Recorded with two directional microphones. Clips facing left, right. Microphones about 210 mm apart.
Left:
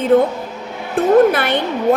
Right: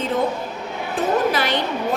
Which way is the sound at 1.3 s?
55° left (ahead or behind).